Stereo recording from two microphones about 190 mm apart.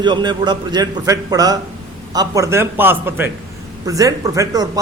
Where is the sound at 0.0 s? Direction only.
25° right (ahead or behind).